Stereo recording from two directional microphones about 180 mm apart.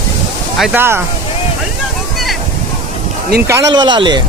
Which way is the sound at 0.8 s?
10° right (ahead or behind).